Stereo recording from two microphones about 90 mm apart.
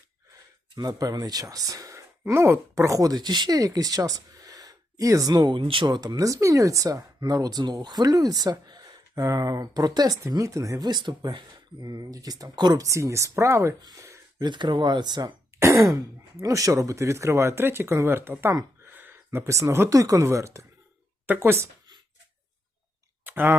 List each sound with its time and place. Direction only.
0.8 s speech: 45° right (ahead or behind)
5.5 s speech: 75° right (ahead or behind); by 10.2 s 45° right (ahead or behind)
10.2 s speech: 35° right (ahead or behind)
10.8 s speech: 50° right (ahead or behind)
11.9 s speech: 40° right (ahead or behind)
14.3 s speech: 55° right (ahead or behind)
15.5 s throat clearing: 35° right (ahead or behind)
16.4 s speech: 40° right (ahead or behind)
18.9 s a sound: 20° right (ahead or behind)
19.9 s speech: 40° right (ahead or behind)
23.2 s clicking: 20° right (ahead or behind)